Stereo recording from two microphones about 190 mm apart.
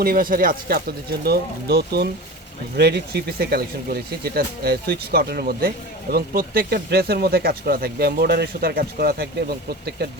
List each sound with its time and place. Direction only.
0.0 s speech: 50° right (ahead or behind)